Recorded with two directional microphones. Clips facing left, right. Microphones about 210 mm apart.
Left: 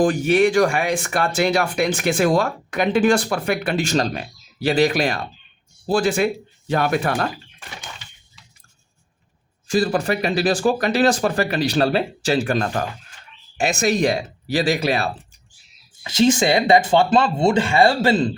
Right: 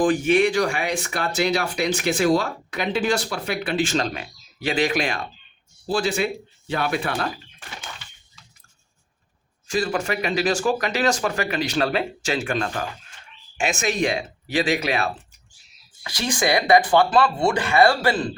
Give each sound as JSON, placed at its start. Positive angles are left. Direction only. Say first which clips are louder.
{"t": 0.0, "sound": "speech", "louder": "left 2 dB", "side_deg": 40}
{"t": 9.6, "sound": "speech", "louder": "left 4 dB", "side_deg": 35}
{"t": 16.0, "sound": "speech", "louder": "left 7 dB", "side_deg": 25}